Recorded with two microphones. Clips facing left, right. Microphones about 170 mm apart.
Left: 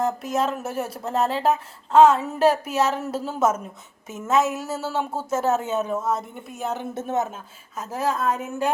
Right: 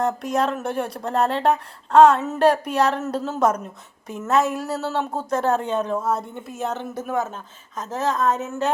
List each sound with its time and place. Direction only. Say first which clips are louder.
0.0 s speech: right 2 dB; centre (ahead or behind)
6.8 s speech: even; 25° left (ahead or behind)
7.8 s a woman's voice: right 2 dB; 10° left (ahead or behind)